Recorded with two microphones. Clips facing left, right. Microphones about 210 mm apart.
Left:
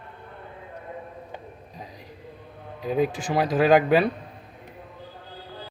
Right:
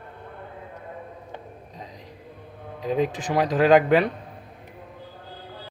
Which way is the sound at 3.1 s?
20° right (ahead or behind).